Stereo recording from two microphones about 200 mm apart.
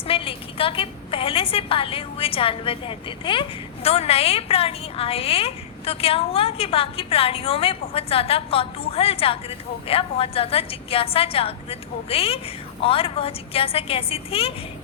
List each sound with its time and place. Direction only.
0.1 s a woman's voice: 25° left (ahead or behind)